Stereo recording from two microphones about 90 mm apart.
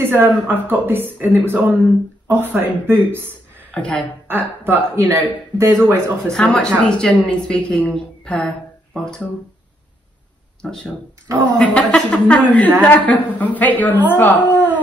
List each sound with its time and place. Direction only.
0.0 s speech: 25° right (ahead or behind)
3.7 s a woman's voice: 10° left (ahead or behind)
4.3 s speech: 25° right (ahead or behind)
6.2 s a woman's voice: 10° left (ahead or behind)
10.6 s a woman's voice: 10° left (ahead or behind)